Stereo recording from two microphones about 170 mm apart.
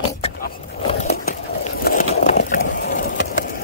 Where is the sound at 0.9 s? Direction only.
40° left (ahead or behind).